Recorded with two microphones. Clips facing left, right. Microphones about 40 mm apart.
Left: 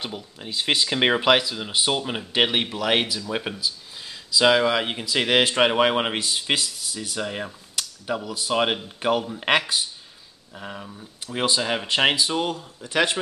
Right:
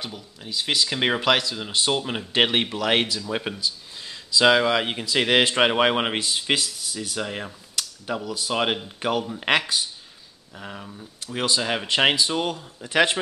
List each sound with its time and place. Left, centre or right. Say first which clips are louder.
0.0 s speech: left 3 dB; left
0.8 s speech: left 3 dB; centre